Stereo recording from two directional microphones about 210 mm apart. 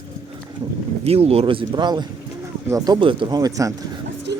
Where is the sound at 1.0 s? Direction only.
30° right (ahead or behind).